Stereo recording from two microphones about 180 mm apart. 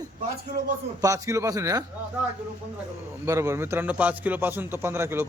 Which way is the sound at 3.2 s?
15° right (ahead or behind).